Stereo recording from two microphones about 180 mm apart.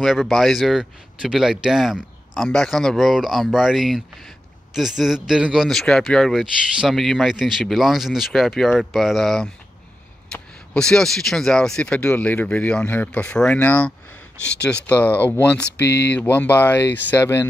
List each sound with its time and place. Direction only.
0.0 s speech: centre (ahead or behind)
15.8 s speech: 70° left (ahead or behind)
16.2 s speech: 10° left (ahead or behind)